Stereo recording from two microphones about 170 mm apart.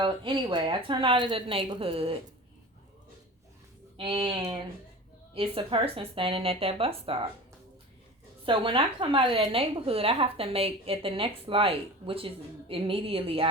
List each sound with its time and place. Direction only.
0.0 s a woman's voice: 30° right (ahead or behind)
3.9 s a woman's voice: 30° right (ahead or behind)
8.4 s a woman's voice: 30° right (ahead or behind)